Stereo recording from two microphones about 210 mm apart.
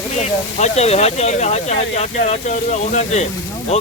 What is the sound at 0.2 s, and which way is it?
Speech, 30° left (ahead or behind).